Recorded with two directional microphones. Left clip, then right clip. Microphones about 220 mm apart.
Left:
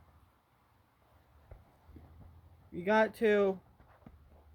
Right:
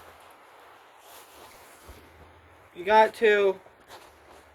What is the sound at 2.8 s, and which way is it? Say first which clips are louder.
Speech: right 9 dB; 55° left (ahead or behind).